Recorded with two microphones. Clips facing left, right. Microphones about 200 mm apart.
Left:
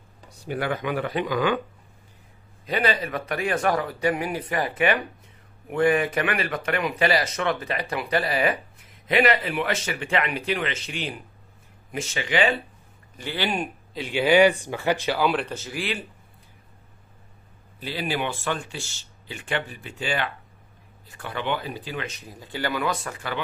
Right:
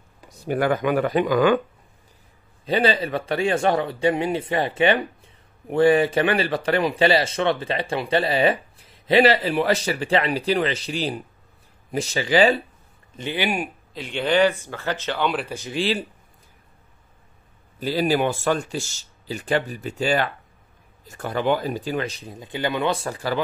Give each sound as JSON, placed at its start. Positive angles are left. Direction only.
{"t": 0.5, "sound": "speech", "side_deg": -45}
{"t": 2.6, "sound": "a man's voice", "side_deg": -30}
{"t": 13.1, "sound": "speech", "side_deg": -20}
{"t": 13.9, "sound": "speech", "side_deg": 5}
{"t": 15.4, "sound": "speech", "side_deg": -15}
{"t": 15.7, "sound": "speech", "side_deg": -30}
{"t": 17.7, "sound": "a man's voice", "side_deg": -40}